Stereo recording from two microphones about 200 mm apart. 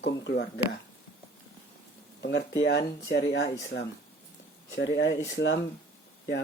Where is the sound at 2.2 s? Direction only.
60° left (ahead or behind).